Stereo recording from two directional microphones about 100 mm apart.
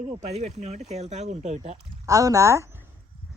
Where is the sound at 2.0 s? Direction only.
35° right (ahead or behind).